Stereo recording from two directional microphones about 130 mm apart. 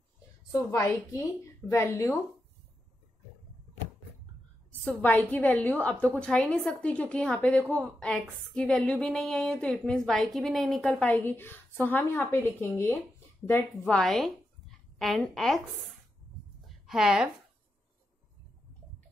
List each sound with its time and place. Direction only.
0.5 s a woman's voice: 25° left (ahead or behind)
4.8 s a woman's voice: 15° left (ahead or behind)
13.5 s a woman's voice: 5° left (ahead or behind)
16.6 s a sound: 5° right (ahead or behind)